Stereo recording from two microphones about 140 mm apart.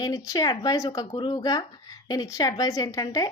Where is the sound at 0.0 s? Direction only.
30° left (ahead or behind).